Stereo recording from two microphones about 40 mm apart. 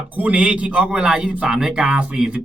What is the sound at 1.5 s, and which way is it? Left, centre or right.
Speech, centre.